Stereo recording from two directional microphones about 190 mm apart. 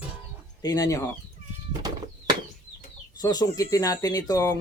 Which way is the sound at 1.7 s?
20° right (ahead or behind).